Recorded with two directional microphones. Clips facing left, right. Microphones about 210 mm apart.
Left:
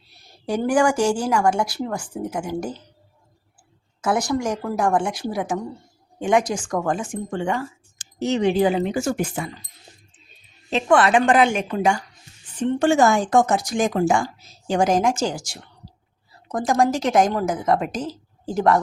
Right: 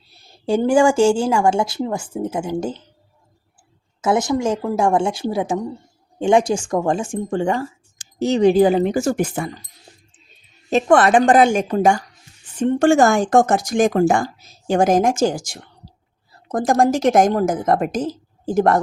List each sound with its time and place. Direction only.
0.4 s a woman's voice: 25° right (ahead or behind)
4.0 s a woman's voice: 20° right (ahead or behind); by 9.5 s 45° right (ahead or behind)
10.7 s speech: 45° right (ahead or behind)